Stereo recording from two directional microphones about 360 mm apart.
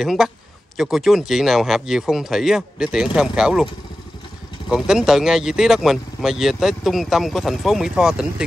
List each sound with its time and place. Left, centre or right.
0.0 s speech: centre
4.6 s speech: centre